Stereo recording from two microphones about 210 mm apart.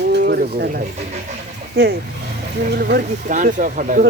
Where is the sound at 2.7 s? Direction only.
45° right (ahead or behind).